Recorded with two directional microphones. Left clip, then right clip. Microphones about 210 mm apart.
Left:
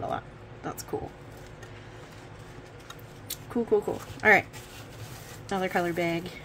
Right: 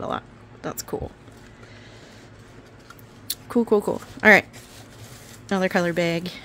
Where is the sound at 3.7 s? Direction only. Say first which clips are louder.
Right 2 dB; 55° right (ahead or behind).